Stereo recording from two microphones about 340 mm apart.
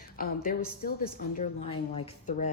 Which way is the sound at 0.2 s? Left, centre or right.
Left.